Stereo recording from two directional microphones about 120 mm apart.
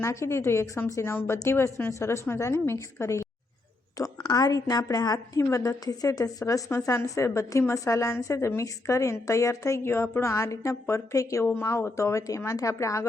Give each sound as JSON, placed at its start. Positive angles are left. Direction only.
{"t": 0.0, "sound": "a woman's voice", "side_deg": 25}
{"t": 4.3, "sound": "a woman's voice", "side_deg": 30}